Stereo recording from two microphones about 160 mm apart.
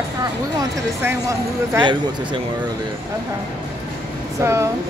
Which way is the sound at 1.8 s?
30° right (ahead or behind).